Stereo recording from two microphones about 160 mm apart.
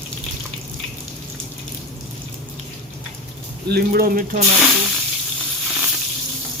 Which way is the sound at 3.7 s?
75° right (ahead or behind).